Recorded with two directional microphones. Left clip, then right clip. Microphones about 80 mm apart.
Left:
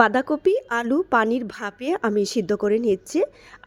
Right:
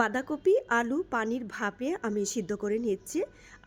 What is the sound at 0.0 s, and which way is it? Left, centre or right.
A woman's voice, left.